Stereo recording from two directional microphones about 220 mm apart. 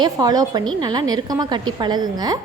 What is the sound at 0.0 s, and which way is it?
A woman's voice, 15° right (ahead or behind).